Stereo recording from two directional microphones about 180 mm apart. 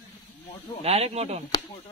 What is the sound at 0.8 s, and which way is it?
Speech, 35° right (ahead or behind).